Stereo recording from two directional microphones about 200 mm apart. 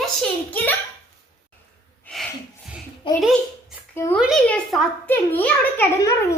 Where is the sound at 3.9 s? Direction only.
15° left (ahead or behind).